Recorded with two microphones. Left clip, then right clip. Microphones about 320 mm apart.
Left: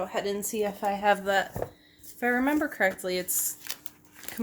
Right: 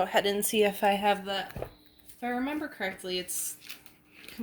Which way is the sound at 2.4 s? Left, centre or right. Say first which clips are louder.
Left 8 dB; left.